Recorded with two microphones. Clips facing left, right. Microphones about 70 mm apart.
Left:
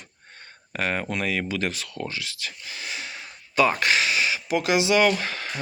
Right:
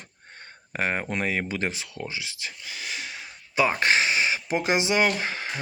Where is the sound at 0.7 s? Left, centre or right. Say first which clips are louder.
Even; right.